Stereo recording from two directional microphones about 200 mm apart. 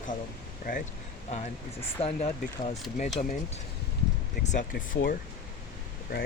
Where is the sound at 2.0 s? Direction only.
30° left (ahead or behind).